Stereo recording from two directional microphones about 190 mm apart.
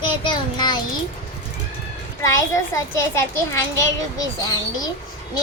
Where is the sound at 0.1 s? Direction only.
25° left (ahead or behind).